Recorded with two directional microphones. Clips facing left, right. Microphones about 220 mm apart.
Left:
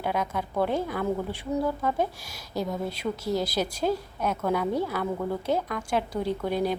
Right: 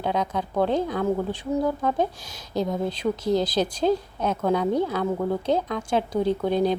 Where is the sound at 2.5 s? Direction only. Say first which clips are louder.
Right 4 dB; 20° right (ahead or behind).